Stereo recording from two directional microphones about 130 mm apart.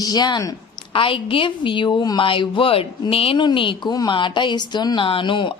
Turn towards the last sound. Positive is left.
turn(degrees=40)  # may be behind; listen again after turning